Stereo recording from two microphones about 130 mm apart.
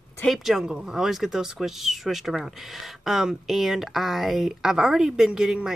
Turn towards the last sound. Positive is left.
turn(degrees=-5)  # may be behind; listen again after turning